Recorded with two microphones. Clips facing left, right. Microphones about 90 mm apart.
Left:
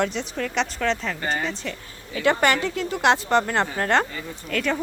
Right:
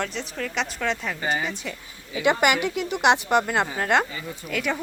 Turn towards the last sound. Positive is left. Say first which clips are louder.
# left 2 dB
turn(degrees=-10)  # may be behind; listen again after turning